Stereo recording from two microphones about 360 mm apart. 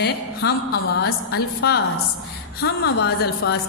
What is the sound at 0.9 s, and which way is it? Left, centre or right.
A woman's voice, left.